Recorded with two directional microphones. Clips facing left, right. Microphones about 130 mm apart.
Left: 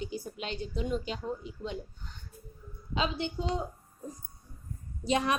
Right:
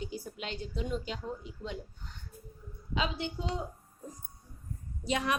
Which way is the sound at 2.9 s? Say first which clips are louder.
Left 2 dB; 30° left (ahead or behind).